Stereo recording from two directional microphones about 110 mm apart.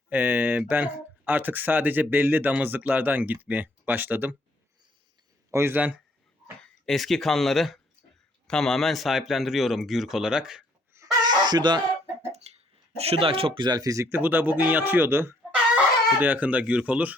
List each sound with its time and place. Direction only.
0.1 s speech: 15° right (ahead or behind)
5.5 s speech: 25° right (ahead or behind)
6.6 s speech: centre (ahead or behind)
10.9 s chuckle: 35° right (ahead or behind)
12.4 s a sound: 80° right
13.0 s speech: 60° right (ahead or behind); by 17.2 s 10° right (ahead or behind)